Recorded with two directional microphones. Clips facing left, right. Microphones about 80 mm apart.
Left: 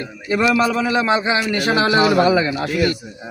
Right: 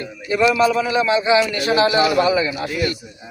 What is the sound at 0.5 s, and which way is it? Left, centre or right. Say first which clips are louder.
Speech: even; left.